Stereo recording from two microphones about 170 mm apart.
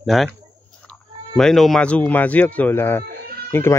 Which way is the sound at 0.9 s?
5° left (ahead or behind).